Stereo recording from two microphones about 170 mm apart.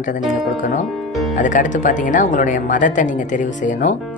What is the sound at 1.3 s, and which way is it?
Speech, 50° left (ahead or behind).